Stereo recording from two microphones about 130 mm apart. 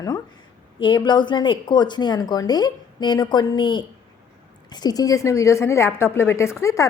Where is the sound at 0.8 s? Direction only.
35° left (ahead or behind).